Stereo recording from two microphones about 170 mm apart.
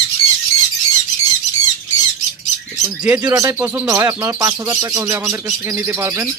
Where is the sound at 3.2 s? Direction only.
20° right (ahead or behind).